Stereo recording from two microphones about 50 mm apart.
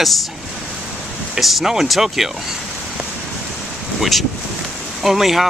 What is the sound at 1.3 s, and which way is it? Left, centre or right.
Speech, centre.